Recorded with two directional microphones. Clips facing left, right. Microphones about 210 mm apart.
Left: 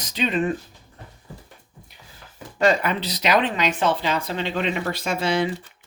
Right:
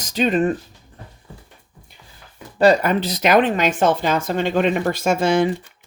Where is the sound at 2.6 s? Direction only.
40° right (ahead or behind).